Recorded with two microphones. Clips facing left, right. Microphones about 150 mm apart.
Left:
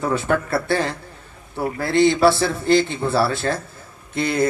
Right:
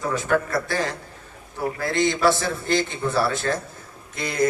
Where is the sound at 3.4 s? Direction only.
35° left (ahead or behind).